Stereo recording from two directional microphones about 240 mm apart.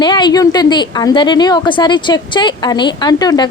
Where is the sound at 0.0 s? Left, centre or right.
Centre.